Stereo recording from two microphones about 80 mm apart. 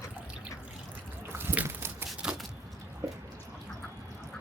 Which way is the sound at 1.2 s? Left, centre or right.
Right.